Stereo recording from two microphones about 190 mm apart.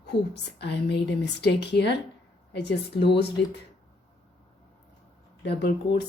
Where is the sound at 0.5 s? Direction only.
60° left (ahead or behind).